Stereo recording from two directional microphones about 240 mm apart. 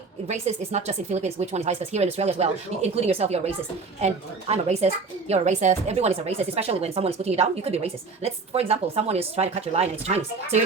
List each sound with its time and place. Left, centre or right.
0.3 s speech: right